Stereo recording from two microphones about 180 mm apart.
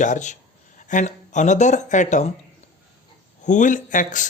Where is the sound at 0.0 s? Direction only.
45° left (ahead or behind).